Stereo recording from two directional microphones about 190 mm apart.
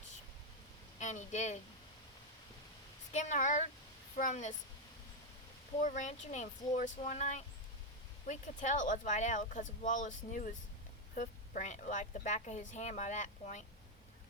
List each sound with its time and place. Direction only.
0.9 s speech: 40° left (ahead or behind)
3.1 s a woman's voice: 40° left (ahead or behind)
5.8 s a woman's voice: 40° left (ahead or behind)